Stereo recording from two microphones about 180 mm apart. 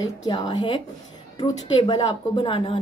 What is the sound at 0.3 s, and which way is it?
A woman's voice, 25° left (ahead or behind).